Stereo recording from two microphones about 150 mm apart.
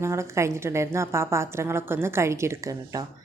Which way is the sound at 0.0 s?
20° right (ahead or behind).